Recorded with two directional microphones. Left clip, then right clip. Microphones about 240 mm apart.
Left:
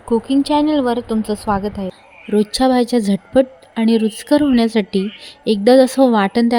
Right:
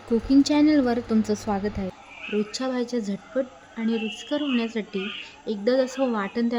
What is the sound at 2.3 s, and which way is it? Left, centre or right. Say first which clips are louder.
Speech: left 13 dB; left.